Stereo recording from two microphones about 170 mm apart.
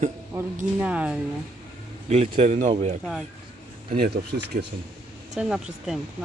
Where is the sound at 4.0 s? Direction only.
60° right (ahead or behind).